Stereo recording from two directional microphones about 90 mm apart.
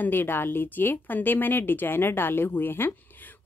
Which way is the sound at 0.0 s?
25° left (ahead or behind).